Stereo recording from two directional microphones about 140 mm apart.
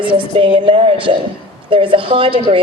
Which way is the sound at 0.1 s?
40° right (ahead or behind).